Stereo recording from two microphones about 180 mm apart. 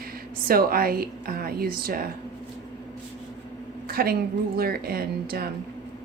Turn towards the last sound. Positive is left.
turn(degrees=-60)  # may be behind; listen again after turning